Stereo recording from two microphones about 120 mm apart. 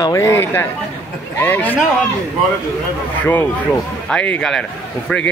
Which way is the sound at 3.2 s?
15° left (ahead or behind).